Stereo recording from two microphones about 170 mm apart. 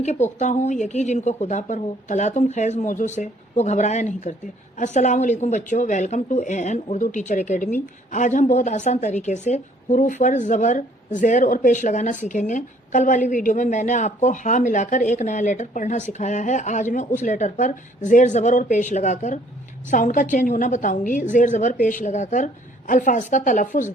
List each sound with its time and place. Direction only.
0.0 s a woman's voice: 40° left (ahead or behind)